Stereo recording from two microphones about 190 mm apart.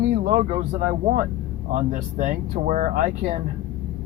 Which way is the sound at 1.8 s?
40° right (ahead or behind).